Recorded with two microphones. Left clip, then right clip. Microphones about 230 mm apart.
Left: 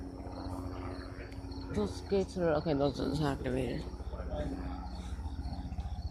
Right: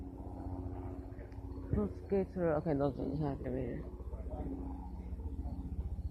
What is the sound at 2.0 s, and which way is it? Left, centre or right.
A woman's voice, centre.